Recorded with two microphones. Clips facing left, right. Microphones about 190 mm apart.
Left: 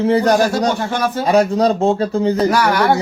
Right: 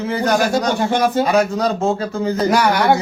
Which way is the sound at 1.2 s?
35° left (ahead or behind).